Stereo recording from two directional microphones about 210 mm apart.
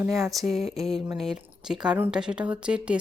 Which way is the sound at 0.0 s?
Centre (ahead or behind).